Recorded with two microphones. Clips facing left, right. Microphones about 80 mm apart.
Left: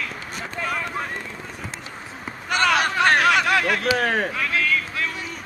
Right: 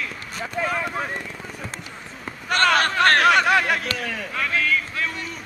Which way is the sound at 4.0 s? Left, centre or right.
Left.